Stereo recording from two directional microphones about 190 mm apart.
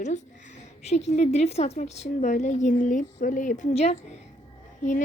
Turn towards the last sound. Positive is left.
turn(degrees=40)  # may be behind; listen again after turning